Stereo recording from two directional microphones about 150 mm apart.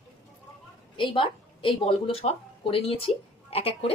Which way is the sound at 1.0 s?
35° left (ahead or behind).